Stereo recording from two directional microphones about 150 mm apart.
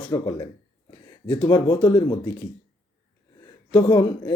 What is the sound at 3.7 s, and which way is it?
Speech, 25° left (ahead or behind).